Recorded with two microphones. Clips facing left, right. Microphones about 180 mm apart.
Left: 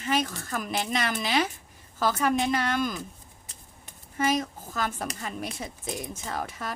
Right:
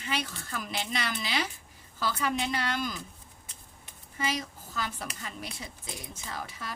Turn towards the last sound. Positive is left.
turn(degrees=50)  # may be behind; listen again after turning